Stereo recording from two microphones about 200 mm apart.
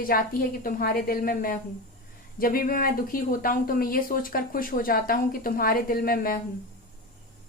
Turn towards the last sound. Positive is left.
turn(degrees=45)  # may be behind; listen again after turning